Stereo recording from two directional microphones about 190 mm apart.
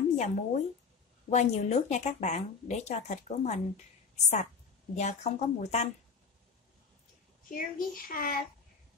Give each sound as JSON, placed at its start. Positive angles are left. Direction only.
{"t": 0.1, "sound": "speech", "side_deg": 35}
{"t": 4.9, "sound": "speech", "side_deg": 35}
{"t": 7.5, "sound": "a child's voice", "side_deg": 50}